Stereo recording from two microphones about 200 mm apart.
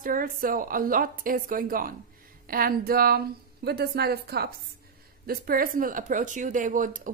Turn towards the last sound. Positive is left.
turn(degrees=-40)  # may be behind; listen again after turning